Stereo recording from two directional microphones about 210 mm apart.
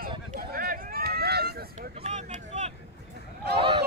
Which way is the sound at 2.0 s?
35° right (ahead or behind).